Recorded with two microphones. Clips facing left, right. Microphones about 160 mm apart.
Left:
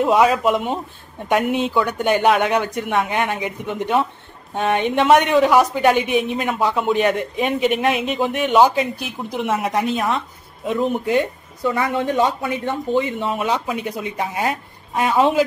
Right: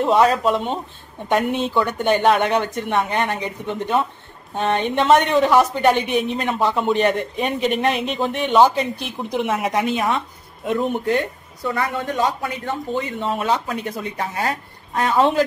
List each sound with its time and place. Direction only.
0.0 s a woman's voice: 5° left (ahead or behind)
11.7 s speech: 20° left (ahead or behind); by 15.4 s 5° left (ahead or behind)